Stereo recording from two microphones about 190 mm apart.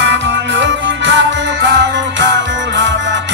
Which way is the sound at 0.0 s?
70° right (ahead or behind).